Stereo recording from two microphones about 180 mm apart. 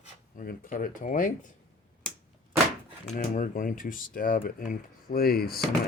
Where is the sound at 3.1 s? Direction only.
45° left (ahead or behind).